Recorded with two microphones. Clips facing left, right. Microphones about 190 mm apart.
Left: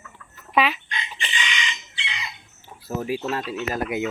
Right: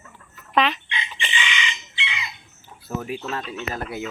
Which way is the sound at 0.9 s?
40° left (ahead or behind).